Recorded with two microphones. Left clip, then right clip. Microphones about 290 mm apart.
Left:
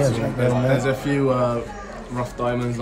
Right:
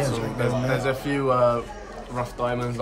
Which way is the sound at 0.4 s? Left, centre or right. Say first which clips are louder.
Left 4 dB; centre.